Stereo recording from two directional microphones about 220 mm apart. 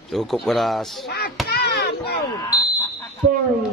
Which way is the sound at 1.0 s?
45° left (ahead or behind).